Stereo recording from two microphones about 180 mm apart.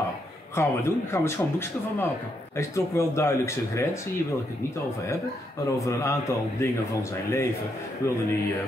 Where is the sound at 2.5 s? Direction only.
15° left (ahead or behind).